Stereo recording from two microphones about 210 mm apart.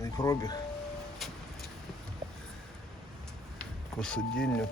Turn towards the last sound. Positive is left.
turn(degrees=5)  # may be behind; listen again after turning